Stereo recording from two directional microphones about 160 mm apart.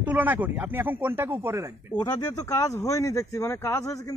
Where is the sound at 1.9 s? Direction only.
20° left (ahead or behind).